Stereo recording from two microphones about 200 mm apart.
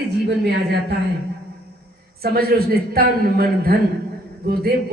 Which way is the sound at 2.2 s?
50° right (ahead or behind).